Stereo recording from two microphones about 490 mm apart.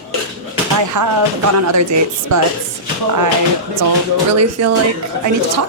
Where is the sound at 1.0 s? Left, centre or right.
Right.